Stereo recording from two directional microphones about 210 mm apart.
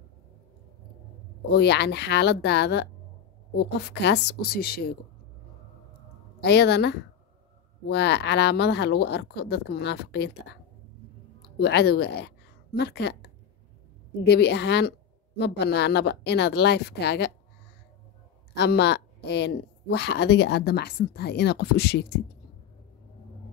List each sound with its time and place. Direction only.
1.5 s speech: 50° left (ahead or behind)
6.4 s a woman's voice: 55° left (ahead or behind)
18.5 s speech: 50° left (ahead or behind)